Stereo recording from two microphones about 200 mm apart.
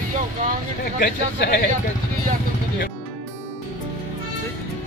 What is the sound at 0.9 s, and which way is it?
Speech, 50° left (ahead or behind).